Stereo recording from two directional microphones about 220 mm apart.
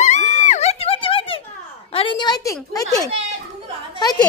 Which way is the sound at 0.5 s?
30° left (ahead or behind).